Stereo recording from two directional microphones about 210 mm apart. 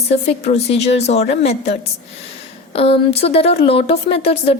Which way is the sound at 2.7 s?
25° left (ahead or behind).